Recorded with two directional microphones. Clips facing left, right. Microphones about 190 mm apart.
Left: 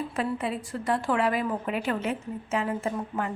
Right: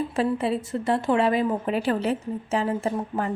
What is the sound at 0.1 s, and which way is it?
A woman's voice, 30° right (ahead or behind).